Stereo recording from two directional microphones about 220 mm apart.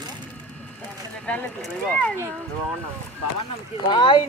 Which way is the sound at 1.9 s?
5° left (ahead or behind).